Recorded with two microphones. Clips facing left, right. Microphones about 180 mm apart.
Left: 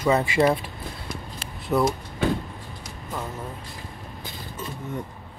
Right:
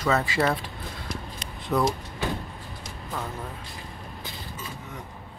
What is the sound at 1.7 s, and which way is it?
Speech, 5° left (ahead or behind).